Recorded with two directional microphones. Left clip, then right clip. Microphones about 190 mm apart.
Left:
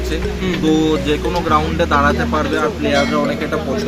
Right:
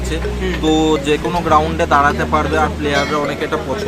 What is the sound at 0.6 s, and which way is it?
Speech, 25° right (ahead or behind).